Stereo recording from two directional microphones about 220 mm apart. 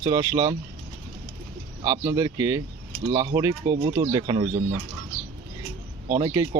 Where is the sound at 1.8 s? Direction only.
15° right (ahead or behind).